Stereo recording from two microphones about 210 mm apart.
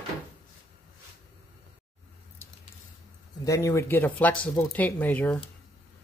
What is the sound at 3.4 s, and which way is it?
Speech, 15° left (ahead or behind).